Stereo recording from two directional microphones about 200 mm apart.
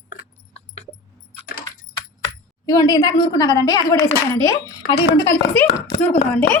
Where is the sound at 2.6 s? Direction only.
20° left (ahead or behind).